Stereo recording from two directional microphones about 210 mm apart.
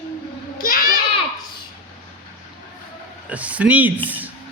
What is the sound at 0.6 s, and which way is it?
Speech, 40° left (ahead or behind).